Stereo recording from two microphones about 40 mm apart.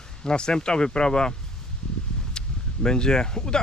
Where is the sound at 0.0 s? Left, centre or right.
Left.